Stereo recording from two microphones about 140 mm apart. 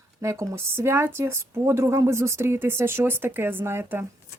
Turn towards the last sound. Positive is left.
turn(degrees=-15)  # may be behind; listen again after turning